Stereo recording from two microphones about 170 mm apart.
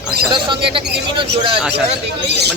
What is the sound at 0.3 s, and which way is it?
Speech, 30° right (ahead or behind).